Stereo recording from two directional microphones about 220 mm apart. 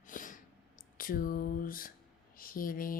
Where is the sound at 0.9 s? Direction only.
40° left (ahead or behind).